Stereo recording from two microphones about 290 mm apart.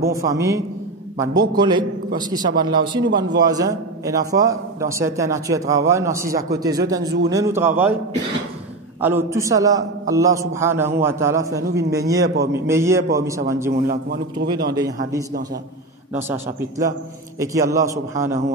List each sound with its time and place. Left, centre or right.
0.1 s a man's voice: centre
9.0 s a man's voice: centre
13.8 s a man's voice: right
16.1 s a man's voice: centre